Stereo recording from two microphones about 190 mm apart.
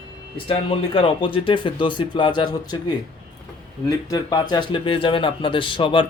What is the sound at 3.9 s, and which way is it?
Speech, 20° left (ahead or behind).